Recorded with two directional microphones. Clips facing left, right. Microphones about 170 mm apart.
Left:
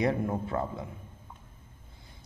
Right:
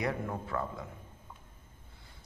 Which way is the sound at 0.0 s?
25° left (ahead or behind).